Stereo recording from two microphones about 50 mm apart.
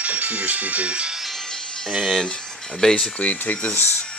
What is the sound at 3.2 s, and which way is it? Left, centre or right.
Speech, left.